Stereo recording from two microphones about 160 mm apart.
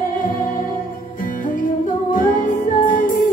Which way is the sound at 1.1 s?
60° left (ahead or behind).